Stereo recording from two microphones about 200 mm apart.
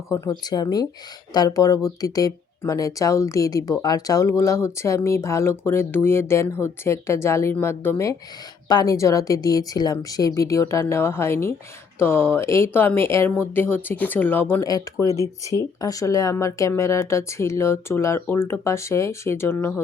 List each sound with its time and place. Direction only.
0.1 s a woman's voice: 20° left (ahead or behind)